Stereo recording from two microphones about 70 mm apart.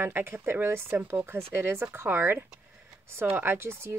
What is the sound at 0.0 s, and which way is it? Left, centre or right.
Speech, right.